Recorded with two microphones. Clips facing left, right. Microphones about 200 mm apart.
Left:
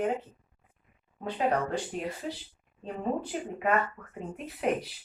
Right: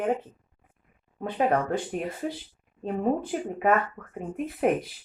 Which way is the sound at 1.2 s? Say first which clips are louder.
Right 4 dB; 50° right (ahead or behind).